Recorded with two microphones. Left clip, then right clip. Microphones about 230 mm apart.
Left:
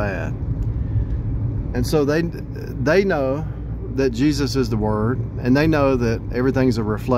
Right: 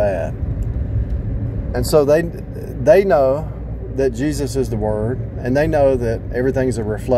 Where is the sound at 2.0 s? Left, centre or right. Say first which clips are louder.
Right 6 dB; centre.